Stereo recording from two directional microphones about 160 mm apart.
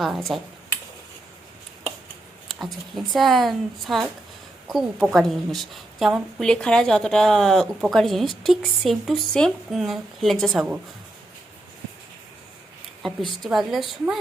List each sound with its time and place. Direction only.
0.0 s a woman's voice: centre (ahead or behind)
2.5 s a woman's voice: centre (ahead or behind)
13.4 s a woman's voice: centre (ahead or behind)